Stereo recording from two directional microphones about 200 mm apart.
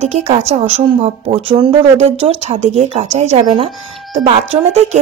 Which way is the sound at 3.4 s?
20° right (ahead or behind).